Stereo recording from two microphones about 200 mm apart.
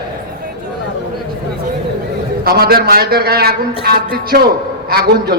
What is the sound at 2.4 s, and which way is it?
A man's voice, 50° right (ahead or behind).